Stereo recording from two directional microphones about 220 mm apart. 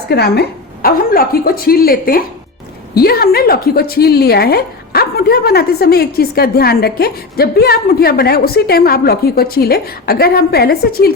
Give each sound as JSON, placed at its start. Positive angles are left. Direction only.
{"t": 0.1, "sound": "a woman's voice", "side_deg": 45}